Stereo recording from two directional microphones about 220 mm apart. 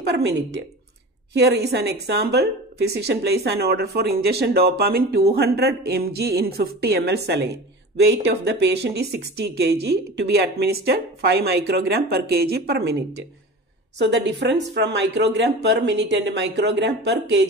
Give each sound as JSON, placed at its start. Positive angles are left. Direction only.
{"t": 0.0, "sound": "a woman's voice", "side_deg": -50}
{"t": 13.9, "sound": "a woman's voice", "side_deg": -50}